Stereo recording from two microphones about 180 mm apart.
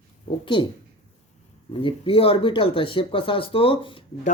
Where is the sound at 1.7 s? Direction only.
30° left (ahead or behind).